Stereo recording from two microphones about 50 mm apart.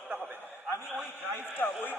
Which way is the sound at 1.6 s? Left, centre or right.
Left.